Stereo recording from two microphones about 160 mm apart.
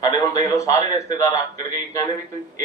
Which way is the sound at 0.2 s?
20° left (ahead or behind).